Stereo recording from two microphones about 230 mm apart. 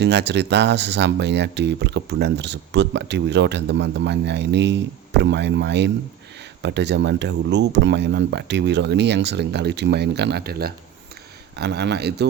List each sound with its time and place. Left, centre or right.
0.0 s speech: right